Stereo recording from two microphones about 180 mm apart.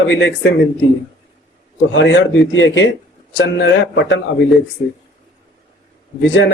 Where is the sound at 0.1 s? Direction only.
90° left.